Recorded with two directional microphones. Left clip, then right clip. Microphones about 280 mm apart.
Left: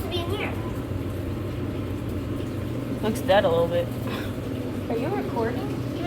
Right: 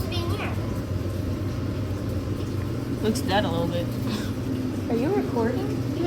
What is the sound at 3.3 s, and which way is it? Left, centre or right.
Speech, centre.